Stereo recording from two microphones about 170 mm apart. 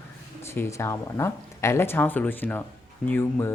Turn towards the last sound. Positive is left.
turn(degrees=15)  # may be behind; listen again after turning